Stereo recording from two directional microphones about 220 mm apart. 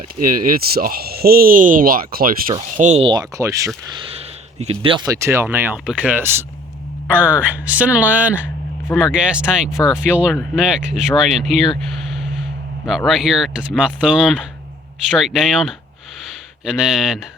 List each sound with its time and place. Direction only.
0.4 s speech: 40° right (ahead or behind); by 3.7 s 15° right (ahead or behind)
4.6 s speech: 25° right (ahead or behind); by 11.7 s centre (ahead or behind)
12.8 s speech: centre (ahead or behind)